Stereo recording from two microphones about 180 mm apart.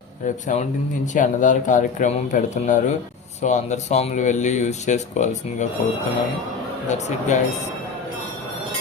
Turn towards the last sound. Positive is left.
turn(degrees=40)  # may be behind; listen again after turning